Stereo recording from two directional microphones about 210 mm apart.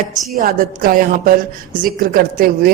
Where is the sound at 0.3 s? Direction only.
40° right (ahead or behind).